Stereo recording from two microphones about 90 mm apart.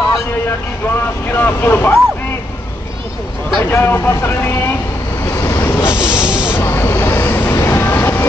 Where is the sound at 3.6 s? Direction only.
25° left (ahead or behind).